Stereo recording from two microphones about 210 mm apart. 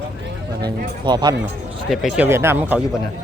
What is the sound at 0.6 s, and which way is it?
Speech, 20° right (ahead or behind).